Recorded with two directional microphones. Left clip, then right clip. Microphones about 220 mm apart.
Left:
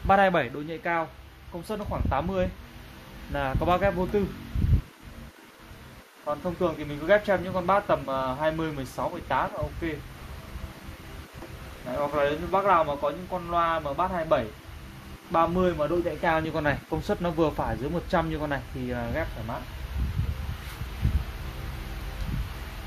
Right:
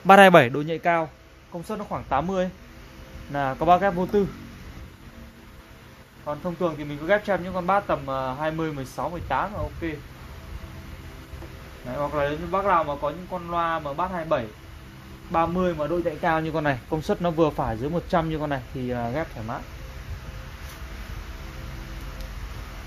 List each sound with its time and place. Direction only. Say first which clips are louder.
0.0 s speech: right 8 dB; 50° right (ahead or behind)
1.7 s speech: right 3 dB; 30° right (ahead or behind)
6.2 s speech: right 1 dB; 25° right (ahead or behind)
11.9 s speech: even; 25° right (ahead or behind)